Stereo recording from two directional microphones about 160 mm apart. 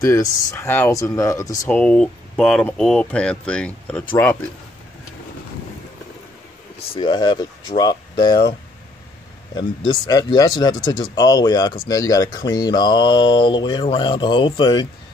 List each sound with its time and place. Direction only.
0.0 s speech: 20° left (ahead or behind)
1.7 s speech: 5° left (ahead or behind)
7.0 s speech: 30° left (ahead or behind)
9.6 s speech: 25° left (ahead or behind)